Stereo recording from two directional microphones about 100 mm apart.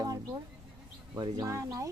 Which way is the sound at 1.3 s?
35° right (ahead or behind).